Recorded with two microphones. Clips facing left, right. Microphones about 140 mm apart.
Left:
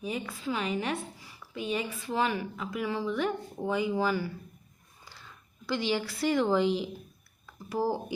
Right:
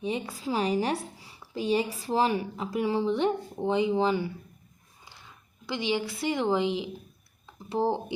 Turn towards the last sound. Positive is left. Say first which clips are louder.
# right 3 dB
turn(degrees=-25)  # may be behind; listen again after turning